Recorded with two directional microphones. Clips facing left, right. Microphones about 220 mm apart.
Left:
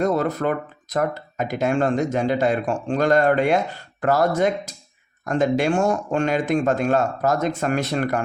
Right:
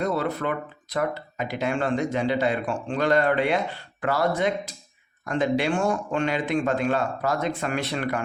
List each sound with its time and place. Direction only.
0.0 s speech: 45° left (ahead or behind)